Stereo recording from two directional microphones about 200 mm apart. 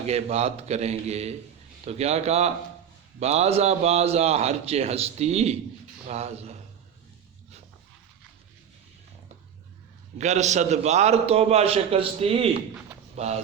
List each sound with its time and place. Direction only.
0.0 s a man's voice: 30° right (ahead or behind)
10.2 s a man's voice: 35° right (ahead or behind)